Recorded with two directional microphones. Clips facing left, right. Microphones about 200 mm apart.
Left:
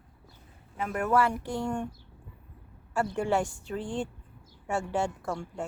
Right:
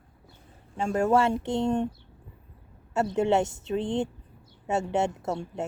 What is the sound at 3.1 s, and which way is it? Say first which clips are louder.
A woman's voice: right 6 dB; 20° right (ahead or behind).